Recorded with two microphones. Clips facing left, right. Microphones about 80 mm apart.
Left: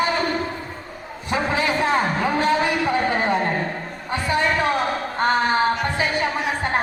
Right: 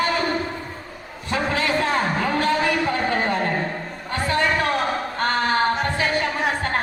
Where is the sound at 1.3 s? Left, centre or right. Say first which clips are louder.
Left 1 dB; centre.